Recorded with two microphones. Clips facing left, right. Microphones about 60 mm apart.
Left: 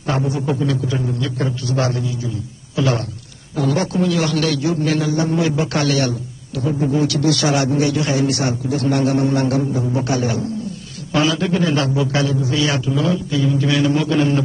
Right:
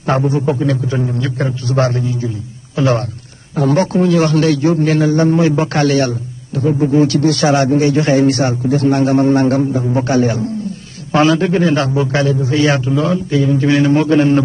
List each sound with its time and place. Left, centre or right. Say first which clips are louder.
0.3 s a man's voice: right 4 dB; right